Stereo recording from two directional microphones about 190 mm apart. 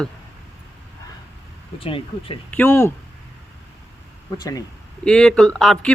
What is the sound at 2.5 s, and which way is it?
Speech, 10° left (ahead or behind).